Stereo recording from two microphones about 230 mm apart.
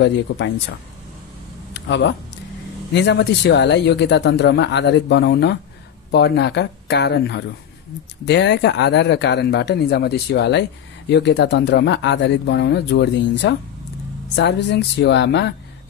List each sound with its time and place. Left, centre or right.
0.0 s a man's voice: left
1.7 s a sound: left
2.9 s a man's voice: left